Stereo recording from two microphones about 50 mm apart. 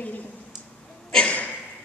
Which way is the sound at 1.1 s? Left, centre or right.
Left.